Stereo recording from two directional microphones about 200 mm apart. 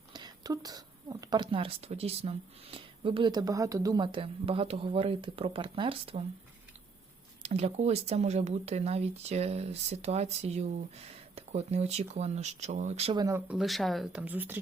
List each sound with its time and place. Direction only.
0.1 s speech: 20° right (ahead or behind)
7.4 s speech: 30° right (ahead or behind)
13.1 s speech: 15° right (ahead or behind)
13.5 s speech: centre (ahead or behind)